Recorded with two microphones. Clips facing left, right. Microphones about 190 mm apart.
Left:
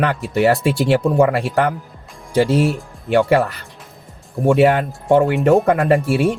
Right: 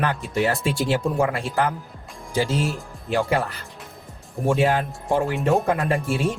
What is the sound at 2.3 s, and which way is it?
A man's voice, 60° left (ahead or behind).